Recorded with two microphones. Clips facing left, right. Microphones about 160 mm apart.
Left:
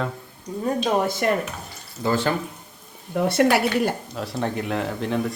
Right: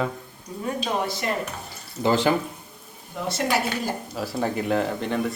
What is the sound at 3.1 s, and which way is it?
Speech, 60° left (ahead or behind).